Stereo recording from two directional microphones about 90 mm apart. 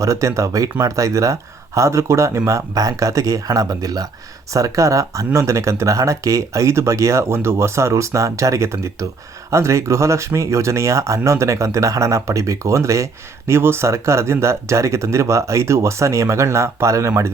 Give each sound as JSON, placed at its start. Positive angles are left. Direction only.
{"t": 0.0, "sound": "speech", "side_deg": -35}